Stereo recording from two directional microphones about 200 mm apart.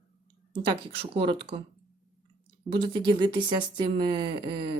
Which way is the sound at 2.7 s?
25° right (ahead or behind).